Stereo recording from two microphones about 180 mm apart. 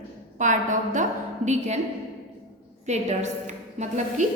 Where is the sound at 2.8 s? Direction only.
40° right (ahead or behind).